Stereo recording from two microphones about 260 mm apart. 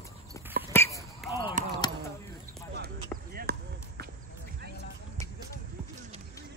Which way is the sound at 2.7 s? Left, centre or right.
Right.